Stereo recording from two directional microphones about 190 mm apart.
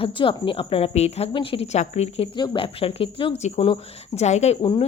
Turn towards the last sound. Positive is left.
turn(degrees=25)  # may be behind; listen again after turning